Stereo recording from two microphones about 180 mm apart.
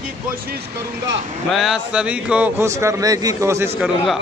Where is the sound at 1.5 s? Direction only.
5° right (ahead or behind).